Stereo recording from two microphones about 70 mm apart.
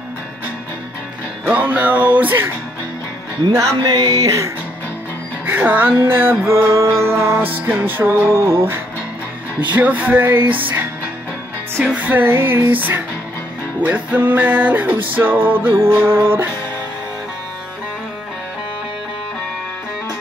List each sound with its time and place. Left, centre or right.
1.5 s music: right
3.5 s a sound: right
5.5 s music: right
7.3 s music: right
9.7 s music: right
12.0 s music: right